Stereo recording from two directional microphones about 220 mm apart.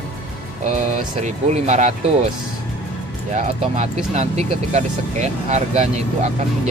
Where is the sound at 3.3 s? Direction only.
30° right (ahead or behind).